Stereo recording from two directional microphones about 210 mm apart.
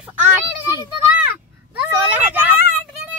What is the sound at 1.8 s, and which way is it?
Speech, 10° right (ahead or behind).